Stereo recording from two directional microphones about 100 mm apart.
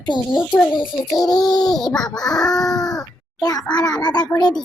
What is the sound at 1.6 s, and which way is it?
Child singing, 5° left (ahead or behind).